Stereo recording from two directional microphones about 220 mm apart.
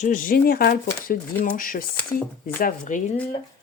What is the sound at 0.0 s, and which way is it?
Speech, 35° left (ahead or behind).